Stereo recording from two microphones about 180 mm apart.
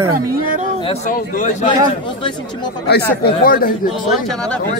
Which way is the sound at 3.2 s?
55° left (ahead or behind).